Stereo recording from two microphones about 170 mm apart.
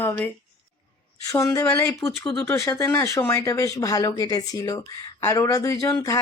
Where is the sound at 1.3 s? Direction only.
15° left (ahead or behind).